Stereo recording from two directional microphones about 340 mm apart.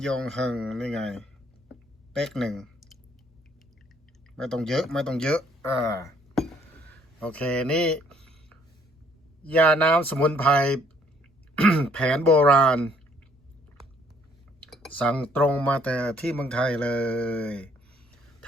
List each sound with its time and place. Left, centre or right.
0.0 s speech: centre
4.4 s speech: centre
9.4 s speech: centre
14.7 s speech: centre